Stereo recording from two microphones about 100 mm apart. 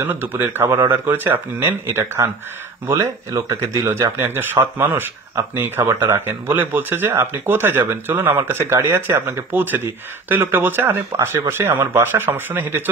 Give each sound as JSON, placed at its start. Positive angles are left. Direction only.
{"t": 0.0, "sound": "speech", "side_deg": -20}